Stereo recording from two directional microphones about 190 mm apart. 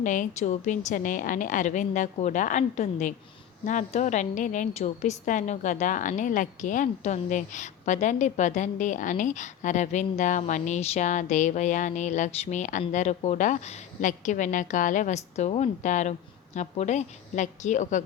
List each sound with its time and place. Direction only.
0.0 s a woman's voice: 40° left (ahead or behind)